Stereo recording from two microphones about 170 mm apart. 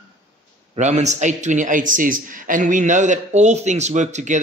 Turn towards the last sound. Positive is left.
turn(degrees=-45)  # may be behind; listen again after turning